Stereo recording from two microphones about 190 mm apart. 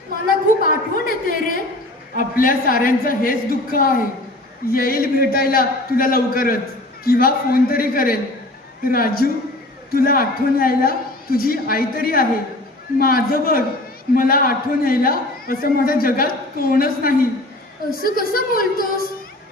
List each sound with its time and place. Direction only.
0.6 s a woman's voice: 45° left (ahead or behind)